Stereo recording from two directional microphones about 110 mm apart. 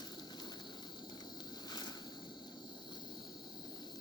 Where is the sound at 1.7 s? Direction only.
40° left (ahead or behind).